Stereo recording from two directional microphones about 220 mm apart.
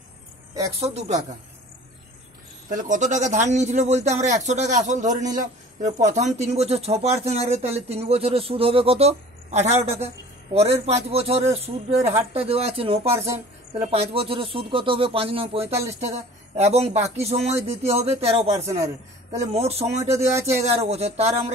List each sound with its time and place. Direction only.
0.7 s speech: 30° right (ahead or behind)
2.7 s a man's voice: 35° right (ahead or behind)
20.2 s speech: 10° right (ahead or behind)
20.8 s speech: 30° right (ahead or behind)